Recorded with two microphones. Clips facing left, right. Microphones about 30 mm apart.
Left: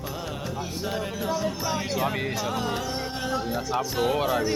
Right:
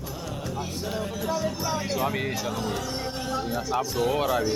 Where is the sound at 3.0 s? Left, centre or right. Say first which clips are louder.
Left 1 dB; centre.